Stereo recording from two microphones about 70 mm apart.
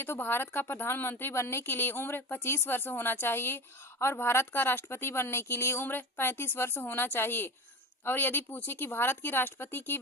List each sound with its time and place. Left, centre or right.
0.0 s a woman's voice: left
1.6 s a woman's voice: left